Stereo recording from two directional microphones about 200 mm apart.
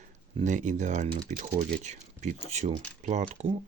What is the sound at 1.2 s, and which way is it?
Speech, 35° right (ahead or behind).